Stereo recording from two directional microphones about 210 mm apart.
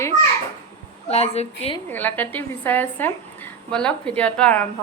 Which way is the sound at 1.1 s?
30° left (ahead or behind).